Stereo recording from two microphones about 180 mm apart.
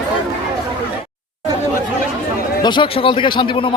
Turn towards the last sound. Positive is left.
turn(degrees=25)  # may be behind; listen again after turning